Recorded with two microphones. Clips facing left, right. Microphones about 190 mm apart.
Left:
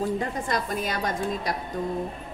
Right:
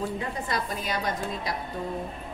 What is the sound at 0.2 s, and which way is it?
A woman's voice, 45° left (ahead or behind).